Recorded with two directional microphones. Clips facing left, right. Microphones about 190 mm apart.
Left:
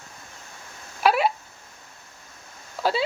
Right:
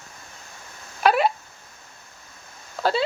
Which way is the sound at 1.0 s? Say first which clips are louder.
Right 1 dB; 5° left (ahead or behind).